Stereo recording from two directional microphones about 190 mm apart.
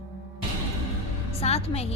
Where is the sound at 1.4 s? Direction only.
35° left (ahead or behind).